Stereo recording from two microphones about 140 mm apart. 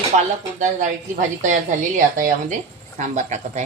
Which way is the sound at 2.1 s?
75° right (ahead or behind).